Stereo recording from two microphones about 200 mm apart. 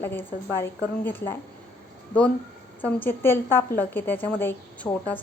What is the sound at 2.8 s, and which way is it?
A woman's voice, 10° left (ahead or behind).